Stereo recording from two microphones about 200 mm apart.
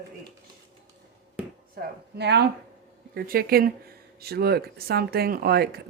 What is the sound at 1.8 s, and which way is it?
Chopping, 55° right (ahead or behind).